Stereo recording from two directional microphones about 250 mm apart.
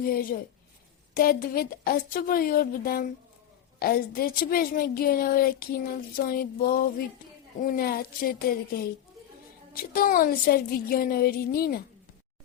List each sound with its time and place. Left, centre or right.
0.1 s a woman's voice: left
9.9 s a woman's voice: left